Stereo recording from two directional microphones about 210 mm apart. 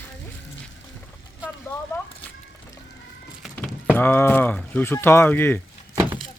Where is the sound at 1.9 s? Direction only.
10° left (ahead or behind).